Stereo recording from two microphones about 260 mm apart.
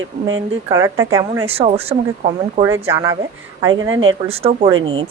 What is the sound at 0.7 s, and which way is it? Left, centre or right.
Speech, centre.